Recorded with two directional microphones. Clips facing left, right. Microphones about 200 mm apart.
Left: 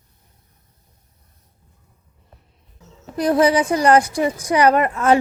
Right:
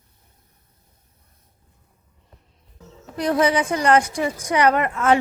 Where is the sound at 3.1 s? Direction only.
35° left (ahead or behind).